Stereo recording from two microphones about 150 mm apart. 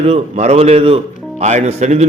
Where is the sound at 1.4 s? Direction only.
50° right (ahead or behind).